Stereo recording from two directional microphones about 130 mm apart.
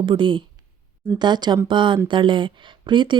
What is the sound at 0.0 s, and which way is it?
Speech, 40° right (ahead or behind).